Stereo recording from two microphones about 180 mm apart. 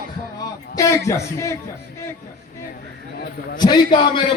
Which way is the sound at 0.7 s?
15° left (ahead or behind).